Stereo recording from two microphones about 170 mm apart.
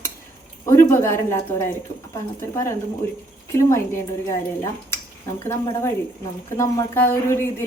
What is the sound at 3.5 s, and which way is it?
Speech, 15° left (ahead or behind).